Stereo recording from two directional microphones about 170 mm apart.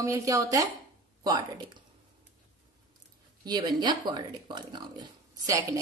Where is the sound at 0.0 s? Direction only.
20° right (ahead or behind).